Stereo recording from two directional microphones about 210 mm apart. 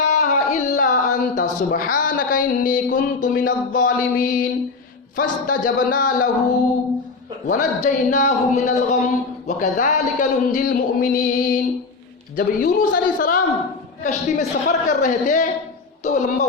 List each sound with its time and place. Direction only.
0.1 s a sound: 35° left (ahead or behind)
1.7 s speech: 40° left (ahead or behind)
7.4 s speech: 35° left (ahead or behind)